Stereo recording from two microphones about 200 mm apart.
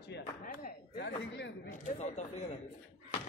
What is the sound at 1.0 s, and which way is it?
Speech, 60° left (ahead or behind).